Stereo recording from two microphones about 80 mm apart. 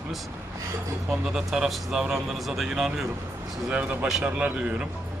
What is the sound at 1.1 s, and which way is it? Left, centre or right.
A man's voice, centre.